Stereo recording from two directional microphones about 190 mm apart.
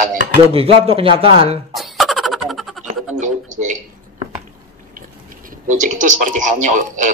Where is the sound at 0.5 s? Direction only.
30° right (ahead or behind).